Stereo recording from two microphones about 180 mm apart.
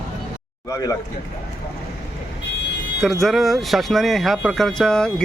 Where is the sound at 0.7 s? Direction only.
20° left (ahead or behind).